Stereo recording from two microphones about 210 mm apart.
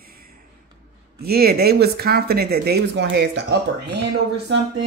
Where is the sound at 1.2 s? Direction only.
45° right (ahead or behind).